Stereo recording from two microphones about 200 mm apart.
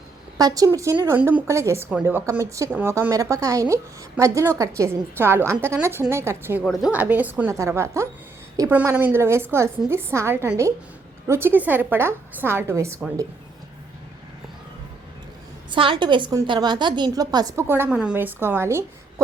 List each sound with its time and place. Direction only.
0.3 s a woman's voice: 20° right (ahead or behind)
6.7 s a woman's voice: centre (ahead or behind)
15.7 s a woman's voice: 25° right (ahead or behind)